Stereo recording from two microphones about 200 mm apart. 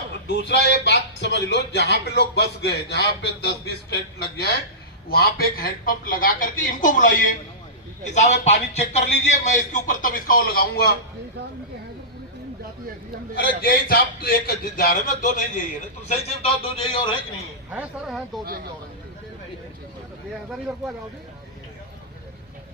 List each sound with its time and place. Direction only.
0.3 s a woman's voice: 60° left (ahead or behind); by 7.1 s 40° left (ahead or behind)
8.1 s a man's voice: 35° left (ahead or behind)
13.6 s a woman's voice: 50° left (ahead or behind); by 17.2 s 25° left (ahead or behind)
17.7 s speech: 10° right (ahead or behind)